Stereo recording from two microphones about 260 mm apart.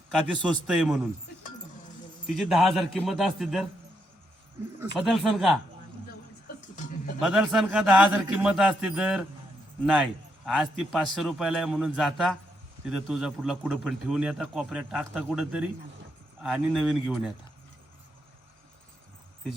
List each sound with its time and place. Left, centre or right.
0.1 s a man's voice: centre
2.3 s a man's voice: centre
4.9 s a man's voice: centre
6.6 s a sound: left
7.2 s a man's voice: centre